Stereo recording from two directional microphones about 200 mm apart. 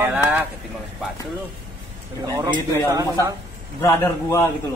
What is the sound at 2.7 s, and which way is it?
Speech, 15° right (ahead or behind).